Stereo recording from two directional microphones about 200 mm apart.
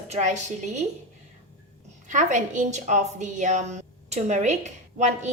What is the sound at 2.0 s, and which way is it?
A woman's voice, 40° right (ahead or behind).